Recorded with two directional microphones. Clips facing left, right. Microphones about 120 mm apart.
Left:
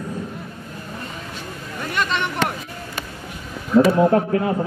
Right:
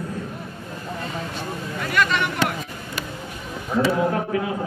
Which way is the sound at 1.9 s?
25° left (ahead or behind).